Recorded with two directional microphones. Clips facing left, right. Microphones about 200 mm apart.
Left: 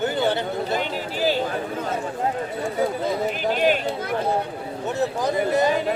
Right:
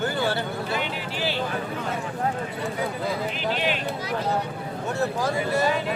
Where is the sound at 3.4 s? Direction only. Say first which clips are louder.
Left 8 dB; 45° left (ahead or behind).